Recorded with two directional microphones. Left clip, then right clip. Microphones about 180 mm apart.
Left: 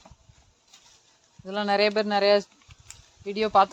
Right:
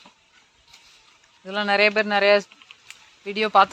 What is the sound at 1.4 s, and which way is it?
Speech, 15° left (ahead or behind).